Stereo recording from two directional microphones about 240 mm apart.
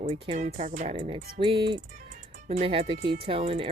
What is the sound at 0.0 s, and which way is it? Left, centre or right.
Speech, right.